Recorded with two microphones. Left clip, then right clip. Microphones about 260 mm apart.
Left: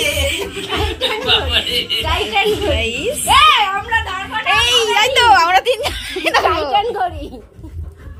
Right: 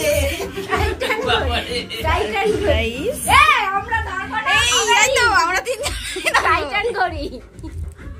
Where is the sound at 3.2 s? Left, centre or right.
Left.